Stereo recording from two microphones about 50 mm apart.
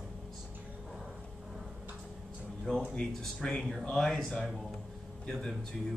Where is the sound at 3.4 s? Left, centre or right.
Centre.